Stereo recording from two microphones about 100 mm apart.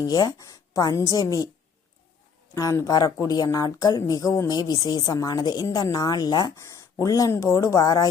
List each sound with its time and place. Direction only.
0.0 s speech: 40° left (ahead or behind)
2.6 s speech: 35° left (ahead or behind)
6.6 s speech: 30° left (ahead or behind)